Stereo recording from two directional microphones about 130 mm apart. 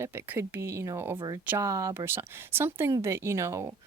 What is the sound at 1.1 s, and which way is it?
Speech, 30° right (ahead or behind).